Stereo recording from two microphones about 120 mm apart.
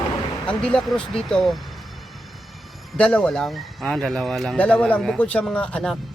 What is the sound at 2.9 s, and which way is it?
Speech, 10° left (ahead or behind).